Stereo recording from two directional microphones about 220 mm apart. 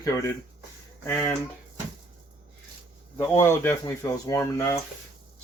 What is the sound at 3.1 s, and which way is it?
Speech, 10° left (ahead or behind).